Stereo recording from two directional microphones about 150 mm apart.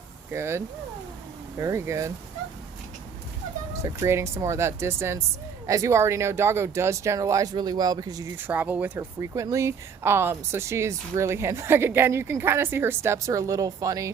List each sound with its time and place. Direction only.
0.3 s speech: 15° right (ahead or behind)
3.8 s speech: 20° right (ahead or behind)
8.4 s speech: 10° right (ahead or behind)